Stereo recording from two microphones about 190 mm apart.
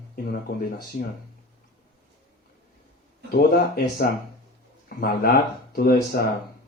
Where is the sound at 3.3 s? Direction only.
55° left (ahead or behind).